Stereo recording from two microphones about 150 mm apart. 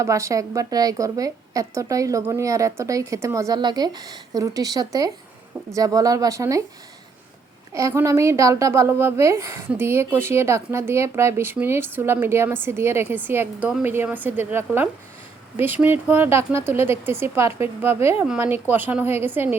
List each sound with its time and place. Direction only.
0.0 s a woman's voice: 20° right (ahead or behind)
7.7 s a woman's voice: 20° right (ahead or behind)